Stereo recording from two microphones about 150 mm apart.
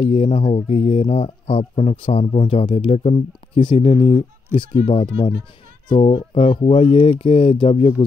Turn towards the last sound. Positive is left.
turn(degrees=40)  # may be behind; listen again after turning